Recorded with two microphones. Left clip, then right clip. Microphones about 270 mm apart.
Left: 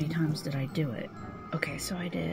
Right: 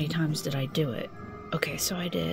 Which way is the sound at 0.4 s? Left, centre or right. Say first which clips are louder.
Right 5 dB; right.